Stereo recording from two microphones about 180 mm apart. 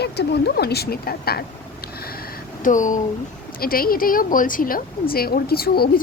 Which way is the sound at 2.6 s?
45° left (ahead or behind).